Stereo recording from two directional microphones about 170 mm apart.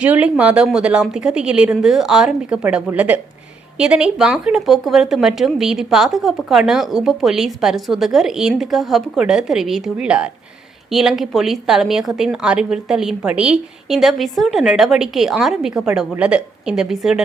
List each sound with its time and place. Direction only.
0.0 s speech: 10° right (ahead or behind)